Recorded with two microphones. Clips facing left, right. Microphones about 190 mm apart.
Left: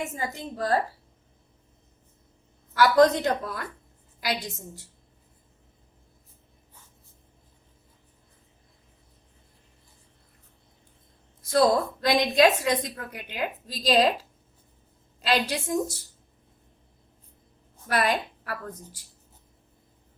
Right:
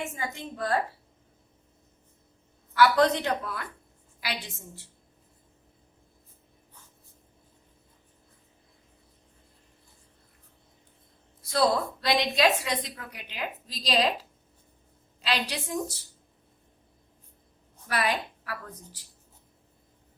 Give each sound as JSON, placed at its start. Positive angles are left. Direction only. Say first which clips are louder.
{"t": 0.0, "sound": "speech", "louder": "left 2 dB", "side_deg": 35}
{"t": 2.7, "sound": "speech", "louder": "left 3 dB", "side_deg": 40}
{"t": 11.4, "sound": "a woman's voice", "louder": "left 4 dB", "side_deg": 50}
{"t": 15.2, "sound": "a woman's voice", "louder": "left 5 dB", "side_deg": 45}
{"t": 17.8, "sound": "a woman's voice", "louder": "left 3 dB", "side_deg": 45}